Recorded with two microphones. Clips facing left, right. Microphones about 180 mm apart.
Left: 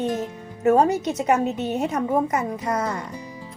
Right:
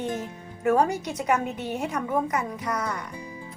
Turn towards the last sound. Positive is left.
turn(degrees=25)  # may be behind; listen again after turning